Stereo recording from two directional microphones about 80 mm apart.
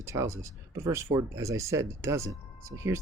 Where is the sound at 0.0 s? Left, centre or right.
Right.